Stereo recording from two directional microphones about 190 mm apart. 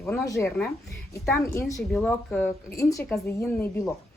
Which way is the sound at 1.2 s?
Centre (ahead or behind).